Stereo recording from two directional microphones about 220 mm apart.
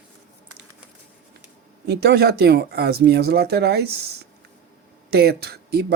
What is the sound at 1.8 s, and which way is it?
Speech, 45° right (ahead or behind).